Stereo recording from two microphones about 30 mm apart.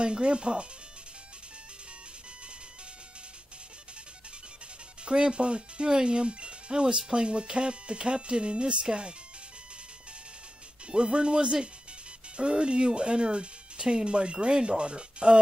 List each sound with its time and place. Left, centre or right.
0.0 s speech: right
5.0 s speech: right
10.9 s speech: right